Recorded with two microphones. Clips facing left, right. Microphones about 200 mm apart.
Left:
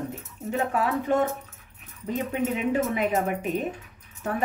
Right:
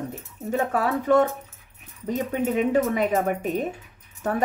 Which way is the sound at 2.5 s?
40° right (ahead or behind).